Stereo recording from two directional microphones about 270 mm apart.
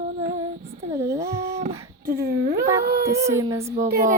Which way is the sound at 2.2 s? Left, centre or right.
Right.